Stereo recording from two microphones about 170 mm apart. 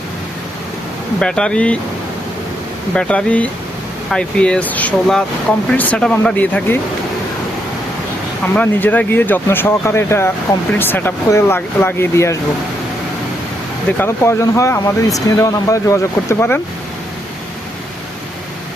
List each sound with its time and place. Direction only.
1.2 s speech: 5° left (ahead or behind)
2.9 s speech: 5° left (ahead or behind)
8.5 s speech: 10° left (ahead or behind)
14.0 s speech: 15° left (ahead or behind)